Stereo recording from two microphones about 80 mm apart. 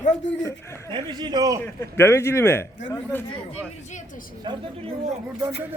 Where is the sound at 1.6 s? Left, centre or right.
Left.